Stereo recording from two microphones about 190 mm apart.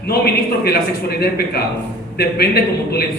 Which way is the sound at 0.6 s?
55° left (ahead or behind).